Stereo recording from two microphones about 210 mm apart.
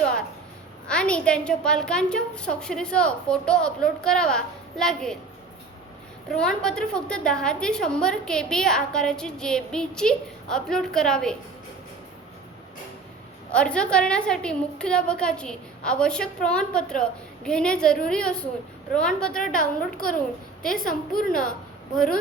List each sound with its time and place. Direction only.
0.9 s a woman's voice: 5° left (ahead or behind)
6.3 s a woman's voice: 5° left (ahead or behind)
13.5 s a woman's voice: 5° left (ahead or behind)
19.5 s a woman's voice: 40° left (ahead or behind)
20.6 s a woman's voice: centre (ahead or behind)
20.8 s a woman's voice: 40° left (ahead or behind)